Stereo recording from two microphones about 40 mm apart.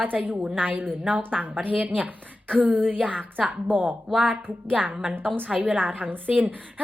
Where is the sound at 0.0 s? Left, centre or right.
Right.